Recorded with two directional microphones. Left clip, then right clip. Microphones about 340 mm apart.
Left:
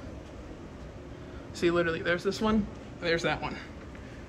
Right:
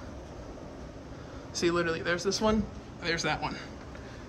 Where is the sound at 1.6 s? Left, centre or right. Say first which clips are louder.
Left 1 dB; centre.